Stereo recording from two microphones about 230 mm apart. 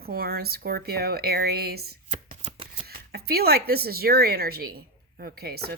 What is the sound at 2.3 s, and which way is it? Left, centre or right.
Shuffling cards, right.